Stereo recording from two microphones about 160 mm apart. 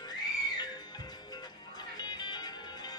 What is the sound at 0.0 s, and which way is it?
Music, 25° left (ahead or behind).